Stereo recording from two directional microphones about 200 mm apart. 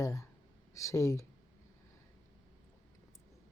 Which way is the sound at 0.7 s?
15° left (ahead or behind).